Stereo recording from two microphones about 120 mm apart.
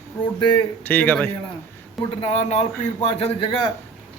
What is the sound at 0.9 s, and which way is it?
Speech, 15° left (ahead or behind).